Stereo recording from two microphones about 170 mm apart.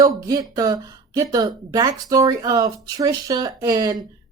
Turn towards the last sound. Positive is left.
turn(degrees=-20)  # may be behind; listen again after turning